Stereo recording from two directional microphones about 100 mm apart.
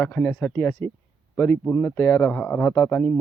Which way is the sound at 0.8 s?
25° left (ahead or behind).